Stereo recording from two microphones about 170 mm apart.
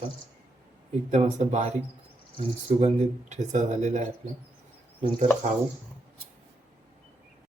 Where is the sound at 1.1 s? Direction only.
40° right (ahead or behind).